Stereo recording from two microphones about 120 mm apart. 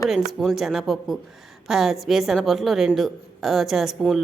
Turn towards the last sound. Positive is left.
turn(degrees=0)  # may be behind; listen again after turning